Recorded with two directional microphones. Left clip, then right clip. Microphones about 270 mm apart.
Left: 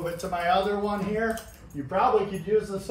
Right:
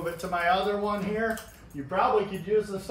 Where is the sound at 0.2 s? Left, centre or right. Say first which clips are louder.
Left 1 dB; centre.